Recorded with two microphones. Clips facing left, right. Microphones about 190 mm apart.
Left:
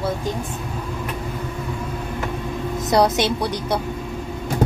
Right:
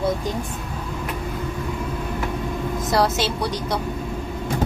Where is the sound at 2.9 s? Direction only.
15° left (ahead or behind).